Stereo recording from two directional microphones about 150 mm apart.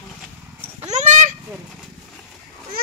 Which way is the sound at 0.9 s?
50° right (ahead or behind).